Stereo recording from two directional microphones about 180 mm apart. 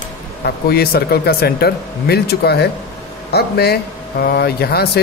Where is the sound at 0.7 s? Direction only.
60° left (ahead or behind).